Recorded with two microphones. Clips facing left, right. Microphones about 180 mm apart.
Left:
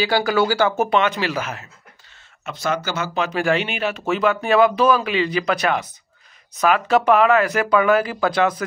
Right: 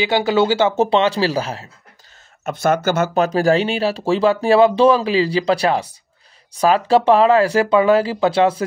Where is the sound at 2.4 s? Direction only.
50° right (ahead or behind).